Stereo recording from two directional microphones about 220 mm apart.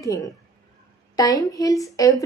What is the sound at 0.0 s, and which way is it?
Speech, 15° left (ahead or behind).